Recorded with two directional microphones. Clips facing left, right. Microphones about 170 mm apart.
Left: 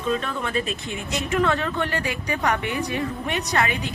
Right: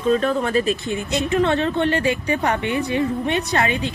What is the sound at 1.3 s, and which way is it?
A woman's voice, 25° right (ahead or behind).